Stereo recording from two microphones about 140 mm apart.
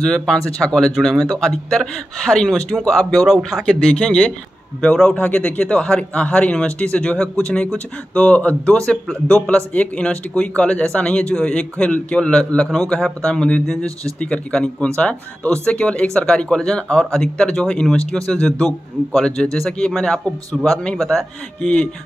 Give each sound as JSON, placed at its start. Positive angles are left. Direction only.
{"t": 0.0, "sound": "a man's voice", "side_deg": 5}